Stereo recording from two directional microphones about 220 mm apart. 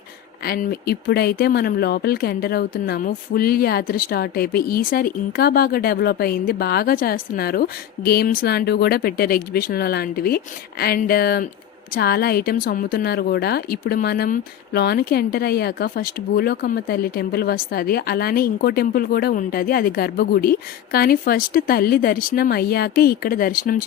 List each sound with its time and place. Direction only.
0.4 s speech: 45° left (ahead or behind)